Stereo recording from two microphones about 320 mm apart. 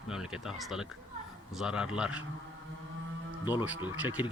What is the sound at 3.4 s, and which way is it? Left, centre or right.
Speech, centre.